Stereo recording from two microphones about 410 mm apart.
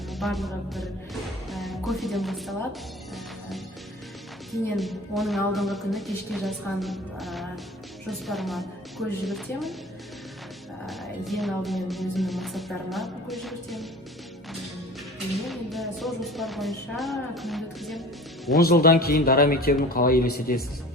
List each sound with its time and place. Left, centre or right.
0.1 s speech: centre
4.8 s speech: centre
10.8 s speech: centre
15.4 s speech: centre
18.5 s a man's voice: left